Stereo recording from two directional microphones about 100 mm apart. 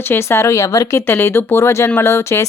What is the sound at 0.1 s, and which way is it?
Speech, 25° left (ahead or behind).